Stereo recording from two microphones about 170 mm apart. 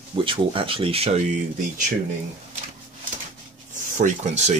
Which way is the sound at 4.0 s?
45° right (ahead or behind).